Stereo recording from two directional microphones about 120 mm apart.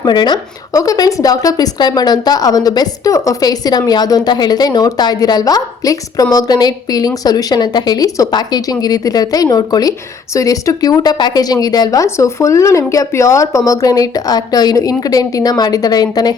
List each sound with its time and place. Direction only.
0.0 s a woman's voice: 35° left (ahead or behind)